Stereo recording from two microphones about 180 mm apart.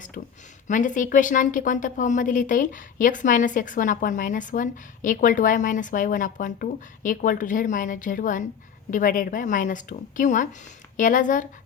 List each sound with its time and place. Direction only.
0.2 s a woman's voice: 45° left (ahead or behind)